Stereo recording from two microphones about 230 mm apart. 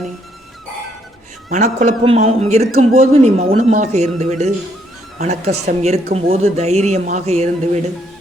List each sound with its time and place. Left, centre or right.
1.5 s a man's voice: right